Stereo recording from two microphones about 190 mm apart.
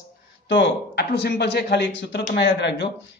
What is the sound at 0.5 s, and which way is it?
A man's voice, 65° left (ahead or behind).